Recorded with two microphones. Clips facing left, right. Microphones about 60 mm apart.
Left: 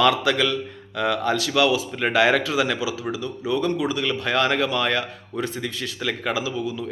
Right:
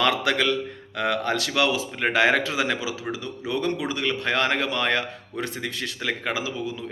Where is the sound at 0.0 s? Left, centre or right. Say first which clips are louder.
Left 3 dB; right.